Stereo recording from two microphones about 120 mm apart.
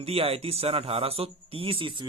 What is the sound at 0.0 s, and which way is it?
Speech, 55° right (ahead or behind).